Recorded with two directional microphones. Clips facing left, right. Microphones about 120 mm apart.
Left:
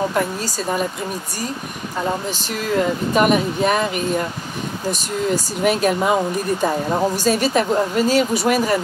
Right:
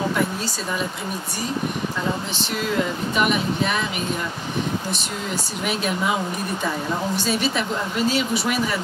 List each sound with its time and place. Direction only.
0.1 s a woman's voice: 45° left (ahead or behind)
3.2 s a woman's voice: 45° left (ahead or behind)
7.2 s a woman's voice: 40° left (ahead or behind)